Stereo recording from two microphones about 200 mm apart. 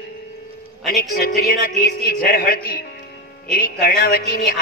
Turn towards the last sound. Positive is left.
turn(degrees=50)  # may be behind; listen again after turning